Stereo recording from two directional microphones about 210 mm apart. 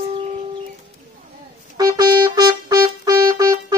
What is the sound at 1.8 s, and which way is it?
Music, 20° right (ahead or behind).